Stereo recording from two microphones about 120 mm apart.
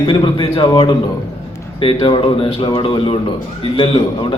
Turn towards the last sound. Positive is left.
turn(degrees=45)  # may be behind; listen again after turning